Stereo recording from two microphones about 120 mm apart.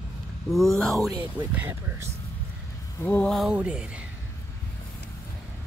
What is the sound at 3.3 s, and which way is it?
Speech, 5° right (ahead or behind).